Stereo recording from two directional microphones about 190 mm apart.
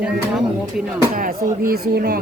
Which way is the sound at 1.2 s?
50° right (ahead or behind).